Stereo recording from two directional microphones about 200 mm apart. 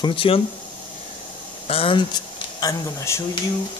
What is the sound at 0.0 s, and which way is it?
Speech, 25° left (ahead or behind).